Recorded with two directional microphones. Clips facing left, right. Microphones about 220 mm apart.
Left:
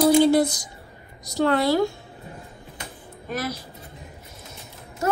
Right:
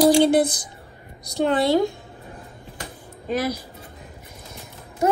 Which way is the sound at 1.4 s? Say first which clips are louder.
Right 1 dB; 20° right (ahead or behind).